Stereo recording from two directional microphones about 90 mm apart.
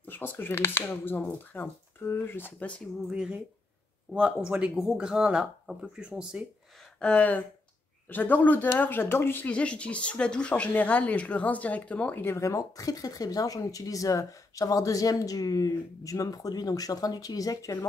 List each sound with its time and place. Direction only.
0.0 s speech: 20° left (ahead or behind)
3.1 s speech: 10° right (ahead or behind)
7.0 s speech: 15° left (ahead or behind)
12.3 s speech: 35° left (ahead or behind)